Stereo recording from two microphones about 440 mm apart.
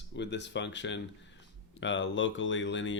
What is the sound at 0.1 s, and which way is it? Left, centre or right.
Speech, left.